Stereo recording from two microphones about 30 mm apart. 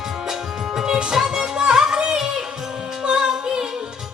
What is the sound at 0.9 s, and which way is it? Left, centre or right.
Music, right.